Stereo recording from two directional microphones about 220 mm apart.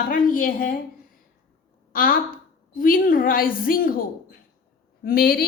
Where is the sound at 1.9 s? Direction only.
40° left (ahead or behind).